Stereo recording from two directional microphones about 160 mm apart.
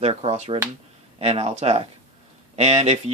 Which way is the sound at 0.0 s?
40° right (ahead or behind).